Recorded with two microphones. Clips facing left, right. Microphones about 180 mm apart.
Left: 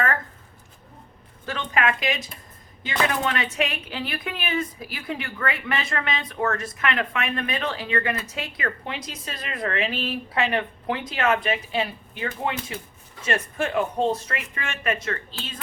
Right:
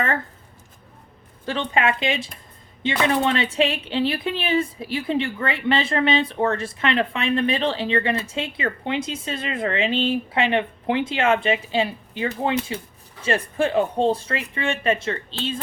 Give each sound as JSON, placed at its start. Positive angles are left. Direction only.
{"t": 1.5, "sound": "speech", "side_deg": -30}